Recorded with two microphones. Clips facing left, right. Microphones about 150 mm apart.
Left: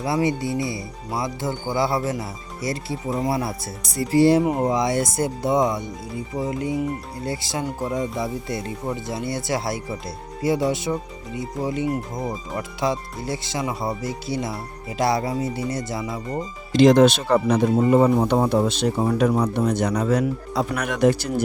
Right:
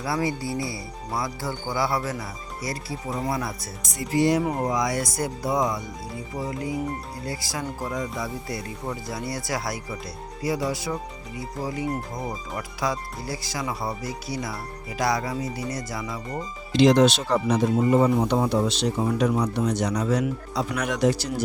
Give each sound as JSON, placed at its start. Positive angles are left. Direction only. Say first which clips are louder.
{"t": 0.0, "sound": "speech", "louder": "left 4 dB", "side_deg": 20}
{"t": 4.4, "sound": "speech", "louder": "left 4 dB", "side_deg": 20}
{"t": 16.7, "sound": "speech", "louder": "left 3 dB", "side_deg": 50}